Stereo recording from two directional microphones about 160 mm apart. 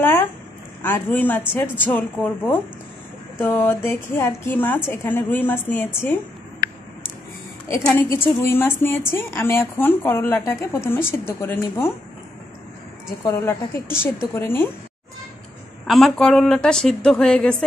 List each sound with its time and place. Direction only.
0.0 s a woman's voice: 15° left (ahead or behind)
7.6 s a woman's voice: 15° left (ahead or behind)
13.2 s a woman's voice: 15° left (ahead or behind)
15.9 s speech: 5° left (ahead or behind)